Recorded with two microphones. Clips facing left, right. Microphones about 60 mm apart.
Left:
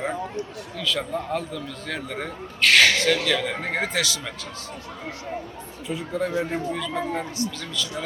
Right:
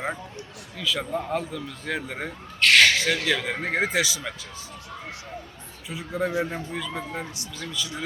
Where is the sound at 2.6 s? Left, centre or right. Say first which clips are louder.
Even; centre.